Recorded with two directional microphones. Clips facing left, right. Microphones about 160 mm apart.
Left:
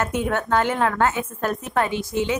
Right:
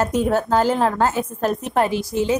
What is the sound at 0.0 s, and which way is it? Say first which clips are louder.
A woman's voice: right 4 dB; 35° right (ahead or behind).